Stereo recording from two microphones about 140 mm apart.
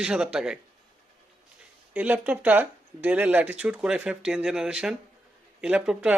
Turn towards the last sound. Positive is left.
turn(degrees=-5)  # may be behind; listen again after turning